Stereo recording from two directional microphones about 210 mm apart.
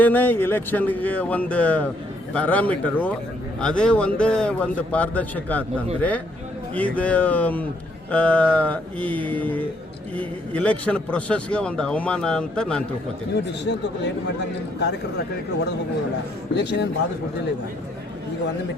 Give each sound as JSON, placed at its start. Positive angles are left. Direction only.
{"t": 0.0, "sound": "a man's voice", "side_deg": 10}
{"t": 16.6, "sound": "speech", "side_deg": 55}